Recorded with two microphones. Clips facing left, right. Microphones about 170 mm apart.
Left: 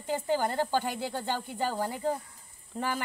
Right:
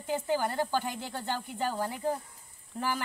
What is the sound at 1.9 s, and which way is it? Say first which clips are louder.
Speech: left 1 dB; 5° right (ahead or behind).